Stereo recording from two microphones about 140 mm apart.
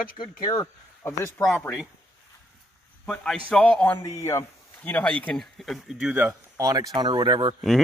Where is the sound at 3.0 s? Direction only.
5° left (ahead or behind).